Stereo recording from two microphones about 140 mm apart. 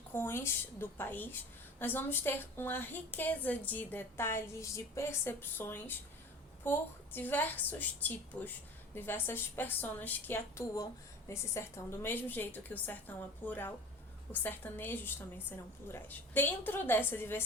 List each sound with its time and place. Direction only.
0.1 s a woman's voice: 15° left (ahead or behind)